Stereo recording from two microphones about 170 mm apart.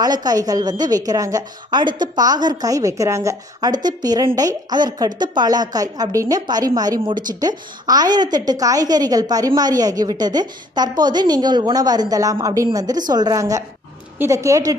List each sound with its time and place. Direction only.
0.0 s a woman's voice: 25° right (ahead or behind)